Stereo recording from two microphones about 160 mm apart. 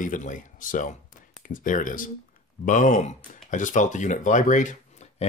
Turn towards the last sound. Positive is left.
turn(degrees=50)  # may be behind; listen again after turning